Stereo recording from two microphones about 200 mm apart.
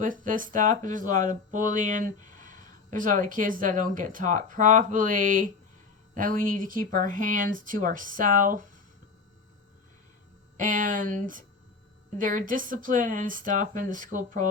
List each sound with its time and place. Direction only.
0.0 s speech: 40° right (ahead or behind)
10.6 s speech: 40° right (ahead or behind)